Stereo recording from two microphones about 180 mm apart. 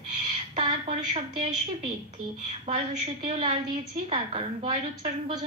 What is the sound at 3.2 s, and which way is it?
A woman's voice, 30° right (ahead or behind).